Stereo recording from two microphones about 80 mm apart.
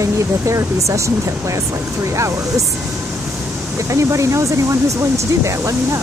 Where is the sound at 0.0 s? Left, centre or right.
Right.